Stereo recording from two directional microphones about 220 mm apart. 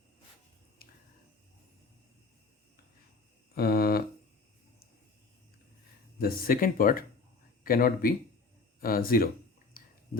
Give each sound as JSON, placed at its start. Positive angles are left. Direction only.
{"t": 0.8, "sound": "a sound", "side_deg": 40}
{"t": 3.5, "sound": "hum", "side_deg": 45}
{"t": 6.1, "sound": "speech", "side_deg": 40}
{"t": 9.7, "sound": "chewing", "side_deg": 40}